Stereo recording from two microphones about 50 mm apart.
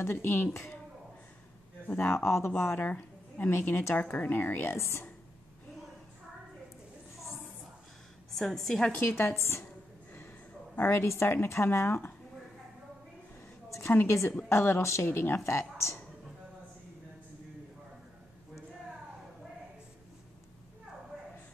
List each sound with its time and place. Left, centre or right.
0.0 s speech: left
2.2 s speech: left
2.5 s a woman's voice: left
4.7 s speech: left
8.4 s a woman's voice: centre
9.0 s speech: left
10.8 s speech: left
13.8 s speech: left